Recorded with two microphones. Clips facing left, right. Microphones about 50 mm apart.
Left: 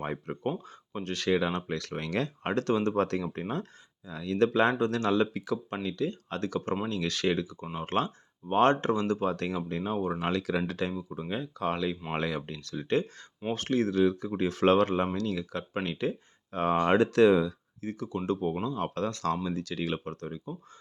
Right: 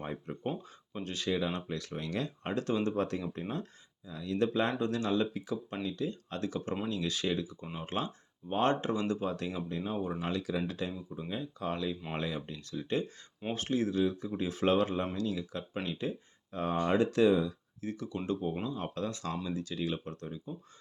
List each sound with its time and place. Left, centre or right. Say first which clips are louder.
0.0 s speech: left 5 dB; left
1.7 s speech: left 5 dB; left
3.3 s speech: left 4 dB; left
6.8 s speech: left 3 dB; left
10.7 s speech: left 5 dB; left
17.7 s speech: left 3 dB; left
18.7 s speech: left 5 dB; left